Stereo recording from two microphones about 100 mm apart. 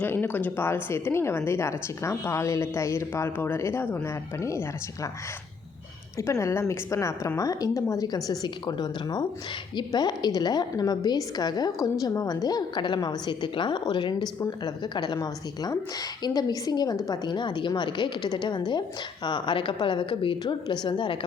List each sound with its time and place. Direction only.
0.0 s a woman's voice: 20° left (ahead or behind)
6.1 s a woman's voice: 30° left (ahead or behind); by 21.2 s 55° left (ahead or behind)